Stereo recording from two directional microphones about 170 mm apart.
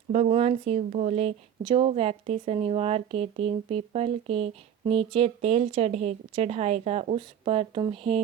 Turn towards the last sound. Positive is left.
turn(degrees=-30)  # may be behind; listen again after turning